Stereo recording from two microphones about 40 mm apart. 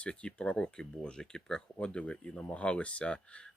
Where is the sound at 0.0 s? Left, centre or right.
Left.